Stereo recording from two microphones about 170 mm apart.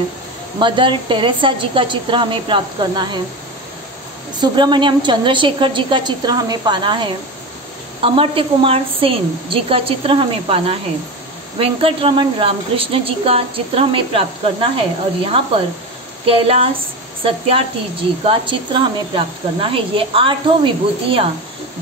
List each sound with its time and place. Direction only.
0.6 s a woman's voice: 30° right (ahead or behind)
4.4 s a woman's voice: 25° right (ahead or behind)